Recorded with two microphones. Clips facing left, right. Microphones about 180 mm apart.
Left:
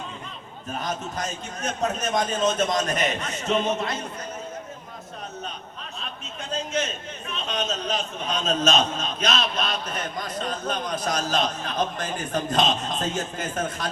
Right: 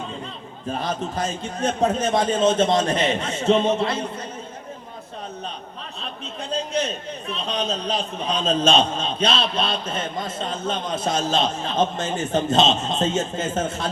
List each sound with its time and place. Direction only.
0.8 s a man's voice: 30° right (ahead or behind)
6.5 s a man's voice: 35° right (ahead or behind)